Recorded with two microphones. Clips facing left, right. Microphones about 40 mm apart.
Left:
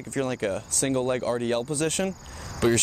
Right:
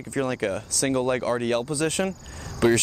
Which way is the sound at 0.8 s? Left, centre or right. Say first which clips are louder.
Right 2 dB; centre.